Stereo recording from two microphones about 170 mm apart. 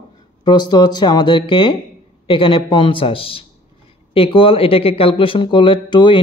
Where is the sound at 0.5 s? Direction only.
25° left (ahead or behind).